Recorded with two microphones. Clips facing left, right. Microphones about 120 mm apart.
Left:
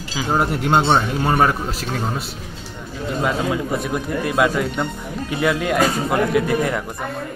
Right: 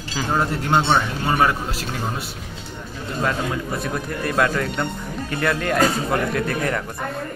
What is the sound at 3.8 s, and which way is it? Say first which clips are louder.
Speech: left 3 dB; 10° left (ahead or behind).